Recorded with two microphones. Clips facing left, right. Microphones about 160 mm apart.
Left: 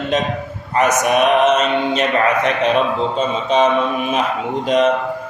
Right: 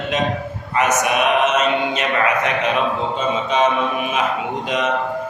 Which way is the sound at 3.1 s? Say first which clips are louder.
Left 3 dB; 35° left (ahead or behind).